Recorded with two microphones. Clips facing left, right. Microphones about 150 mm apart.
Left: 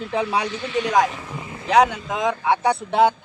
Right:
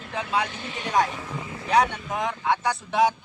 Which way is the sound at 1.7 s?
90° left.